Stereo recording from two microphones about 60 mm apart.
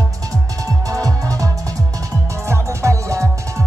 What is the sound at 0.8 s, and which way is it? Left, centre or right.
Music, right.